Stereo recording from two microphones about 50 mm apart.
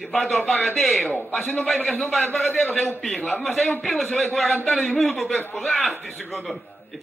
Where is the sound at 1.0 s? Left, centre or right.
Left.